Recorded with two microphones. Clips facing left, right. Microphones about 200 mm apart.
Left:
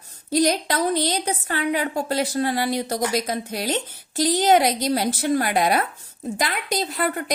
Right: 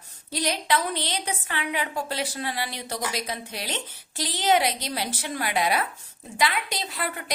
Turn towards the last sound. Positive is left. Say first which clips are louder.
# left 7 dB
turn(degrees=45)  # may be behind; listen again after turning